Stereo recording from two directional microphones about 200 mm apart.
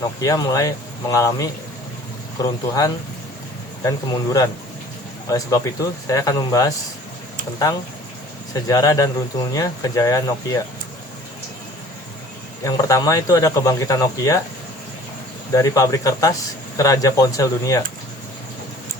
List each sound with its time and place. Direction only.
0.2 s speech: 15° left (ahead or behind)
6.1 s speech: 15° left (ahead or behind)
8.5 s speech: 15° left (ahead or behind)
12.6 s speech: 15° left (ahead or behind)
15.5 s speech: 15° left (ahead or behind)